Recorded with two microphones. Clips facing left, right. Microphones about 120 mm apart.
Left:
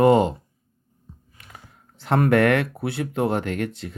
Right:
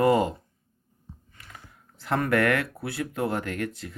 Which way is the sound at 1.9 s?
25° left (ahead or behind).